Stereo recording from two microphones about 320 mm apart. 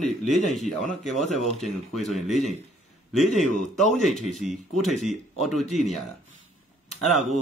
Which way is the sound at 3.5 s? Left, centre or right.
Left.